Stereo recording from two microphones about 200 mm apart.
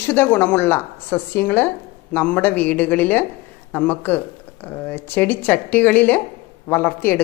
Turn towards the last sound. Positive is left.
turn(degrees=10)  # may be behind; listen again after turning